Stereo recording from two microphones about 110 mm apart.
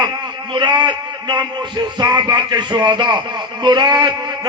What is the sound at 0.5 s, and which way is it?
A man's voice, 45° right (ahead or behind).